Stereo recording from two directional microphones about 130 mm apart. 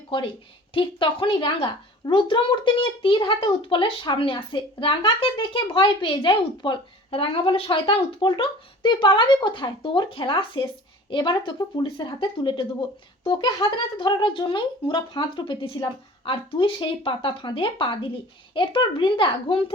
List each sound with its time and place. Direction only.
0.7 s speech: 40° left (ahead or behind)